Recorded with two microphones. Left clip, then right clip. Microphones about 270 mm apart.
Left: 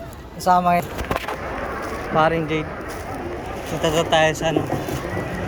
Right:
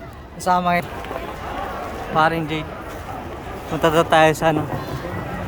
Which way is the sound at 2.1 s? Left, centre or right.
Centre.